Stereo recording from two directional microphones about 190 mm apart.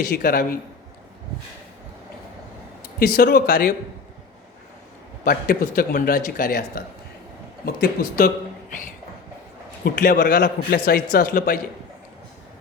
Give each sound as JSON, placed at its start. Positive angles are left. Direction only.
{"t": 0.1, "sound": "a man's voice", "side_deg": 50}
{"t": 2.8, "sound": "speech", "side_deg": 55}
{"t": 5.2, "sound": "a man's voice", "side_deg": 50}
{"t": 9.8, "sound": "a man's voice", "side_deg": 55}